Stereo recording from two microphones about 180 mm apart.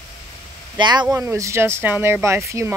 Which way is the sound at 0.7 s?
25° right (ahead or behind).